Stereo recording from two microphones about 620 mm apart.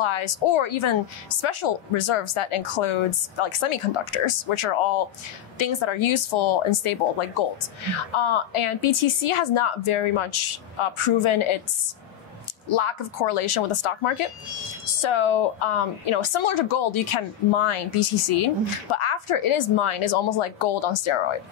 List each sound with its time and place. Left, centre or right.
0.0 s speech: left
12.6 s speech: left